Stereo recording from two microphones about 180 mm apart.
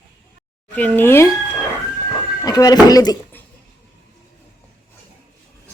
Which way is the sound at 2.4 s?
20° left (ahead or behind).